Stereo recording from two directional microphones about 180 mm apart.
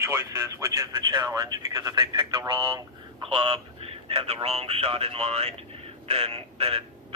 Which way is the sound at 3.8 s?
35° right (ahead or behind).